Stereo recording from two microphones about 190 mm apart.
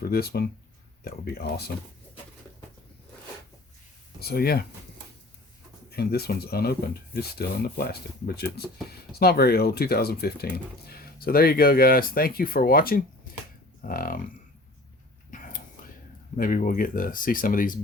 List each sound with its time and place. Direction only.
0.0 s speech: 55° left (ahead or behind)
4.2 s speech: 55° left (ahead or behind)
6.0 s speech: 55° left (ahead or behind)
15.3 s a sound: 45° left (ahead or behind)
16.4 s speech: 45° left (ahead or behind)